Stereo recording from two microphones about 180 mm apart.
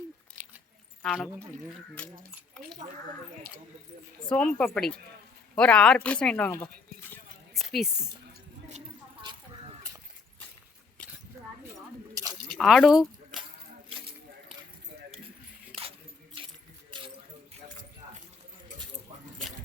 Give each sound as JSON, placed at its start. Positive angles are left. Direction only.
{"t": 1.0, "sound": "speech", "side_deg": 5}
{"t": 4.3, "sound": "a woman's voice", "side_deg": 5}
{"t": 12.1, "sound": "a sound", "side_deg": -20}
{"t": 12.5, "sound": "speech", "side_deg": 0}
{"t": 15.7, "sound": "keys jangling", "side_deg": -30}